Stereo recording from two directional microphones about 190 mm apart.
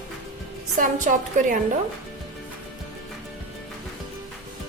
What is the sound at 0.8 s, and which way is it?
Speech, 45° right (ahead or behind).